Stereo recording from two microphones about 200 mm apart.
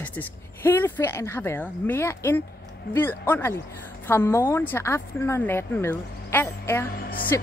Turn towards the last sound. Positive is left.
turn(degrees=45)  # may be behind; listen again after turning